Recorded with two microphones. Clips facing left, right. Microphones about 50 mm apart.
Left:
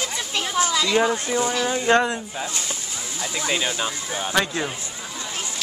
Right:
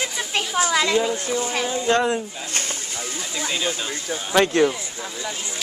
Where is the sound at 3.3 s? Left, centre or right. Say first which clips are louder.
Left 1 dB; left.